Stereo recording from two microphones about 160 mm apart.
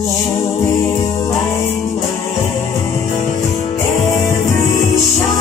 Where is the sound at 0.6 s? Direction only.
20° left (ahead or behind).